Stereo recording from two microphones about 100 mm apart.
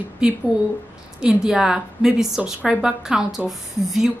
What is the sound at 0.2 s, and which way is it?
A woman's voice, 10° right (ahead or behind).